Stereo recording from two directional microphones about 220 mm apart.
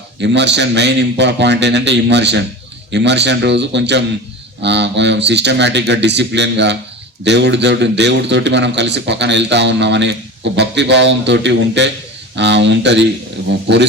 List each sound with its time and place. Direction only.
0.2 s a man's voice: 50° right (ahead or behind)